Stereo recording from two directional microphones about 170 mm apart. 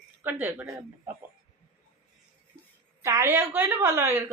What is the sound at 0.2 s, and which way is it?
Speech, 10° right (ahead or behind).